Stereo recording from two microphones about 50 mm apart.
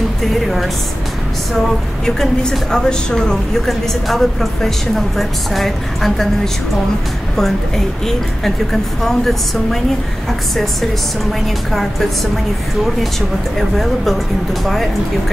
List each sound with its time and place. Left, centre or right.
2.0 s a woman's voice: centre
3.6 s a woman's voice: centre
9.0 s speech: centre
13.6 s speech: centre